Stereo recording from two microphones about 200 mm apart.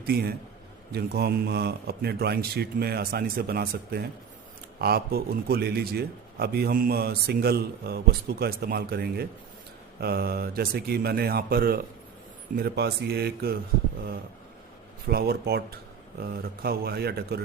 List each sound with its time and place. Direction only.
0.0 s a man's voice: 50° right (ahead or behind)
15.0 s a man's voice: 50° right (ahead or behind)